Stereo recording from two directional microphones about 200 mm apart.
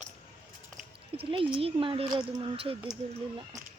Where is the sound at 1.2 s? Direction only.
25° right (ahead or behind).